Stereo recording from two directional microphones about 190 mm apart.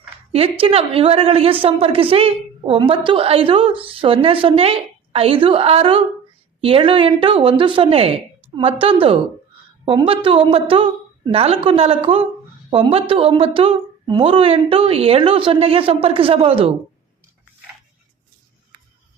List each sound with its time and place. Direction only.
0.3 s a woman's voice: 30° right (ahead or behind)